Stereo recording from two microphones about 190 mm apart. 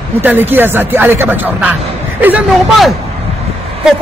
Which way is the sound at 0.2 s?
10° right (ahead or behind).